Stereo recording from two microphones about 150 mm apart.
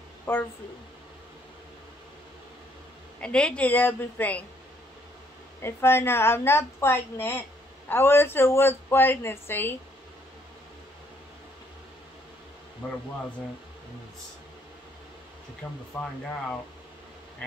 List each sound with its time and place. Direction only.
0.3 s speech: 10° left (ahead or behind)
3.2 s speech: 5° left (ahead or behind)
5.6 s speech: 15° left (ahead or behind)
15.6 s speech: 10° left (ahead or behind)